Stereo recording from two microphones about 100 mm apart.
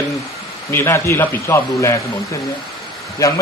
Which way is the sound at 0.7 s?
25° left (ahead or behind).